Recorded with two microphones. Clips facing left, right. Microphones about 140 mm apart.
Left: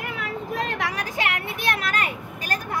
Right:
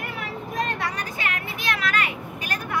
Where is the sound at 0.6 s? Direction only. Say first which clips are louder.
Left 1 dB; 90° left.